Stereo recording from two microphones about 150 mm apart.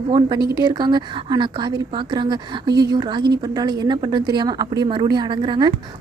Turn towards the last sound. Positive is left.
turn(degrees=-30)  # may be behind; listen again after turning